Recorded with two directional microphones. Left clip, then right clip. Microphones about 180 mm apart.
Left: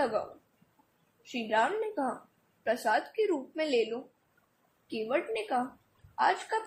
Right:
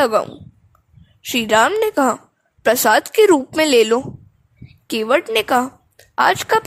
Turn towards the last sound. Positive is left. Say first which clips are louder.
# right 13 dB
turn(degrees=-65)  # may be behind; listen again after turning